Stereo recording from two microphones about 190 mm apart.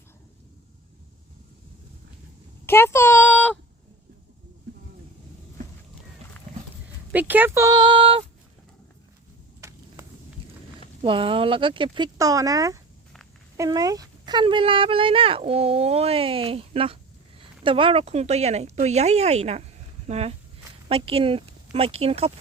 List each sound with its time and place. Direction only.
2.6 s speech: 10° left (ahead or behind)
7.1 s speech: 10° right (ahead or behind); by 8.2 s 25° right (ahead or behind)
9.6 s a sound: 15° right (ahead or behind)
11.0 s speech: 25° right (ahead or behind)